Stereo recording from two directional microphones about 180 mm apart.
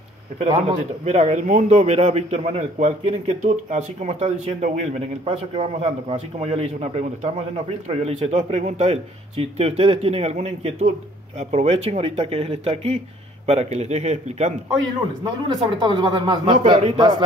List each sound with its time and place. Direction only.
1.0 s a man's voice: 40° right (ahead or behind)
15.4 s speech: 25° right (ahead or behind)